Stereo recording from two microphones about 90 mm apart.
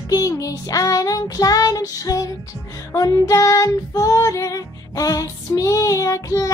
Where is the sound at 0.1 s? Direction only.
40° left (ahead or behind).